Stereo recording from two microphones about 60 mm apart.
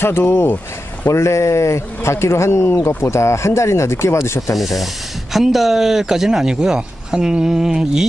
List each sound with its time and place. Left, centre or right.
0.0 s speech: left
1.0 s speech: left
4.6 s speech: centre